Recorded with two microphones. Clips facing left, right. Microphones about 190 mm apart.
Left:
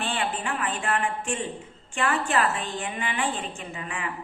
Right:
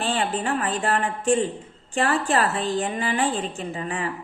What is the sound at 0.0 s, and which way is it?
A woman's voice, 35° right (ahead or behind).